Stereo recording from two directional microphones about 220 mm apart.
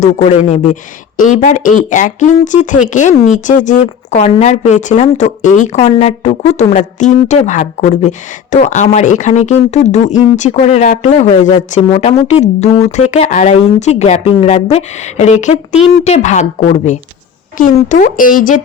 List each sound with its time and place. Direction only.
0.0 s a woman's voice: 30° left (ahead or behind)